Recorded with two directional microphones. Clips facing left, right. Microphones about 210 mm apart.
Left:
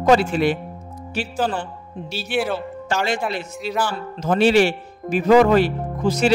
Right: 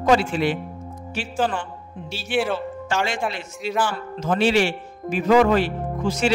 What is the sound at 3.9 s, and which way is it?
A man's voice, 40° left (ahead or behind).